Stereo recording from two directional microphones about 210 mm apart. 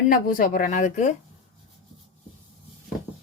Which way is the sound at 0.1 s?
40° left (ahead or behind).